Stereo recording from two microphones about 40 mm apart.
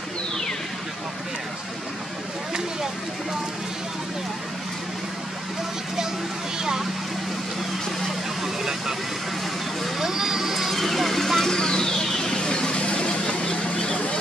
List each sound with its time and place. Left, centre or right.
6.6 s speech: centre
9.9 s vehicle: centre
11.5 s vehicle: centre